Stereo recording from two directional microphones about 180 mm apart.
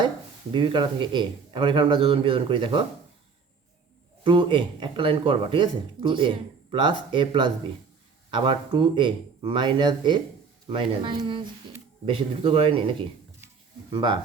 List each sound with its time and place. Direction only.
0.5 s speech: 25° right (ahead or behind)
4.2 s speech: 30° right (ahead or behind)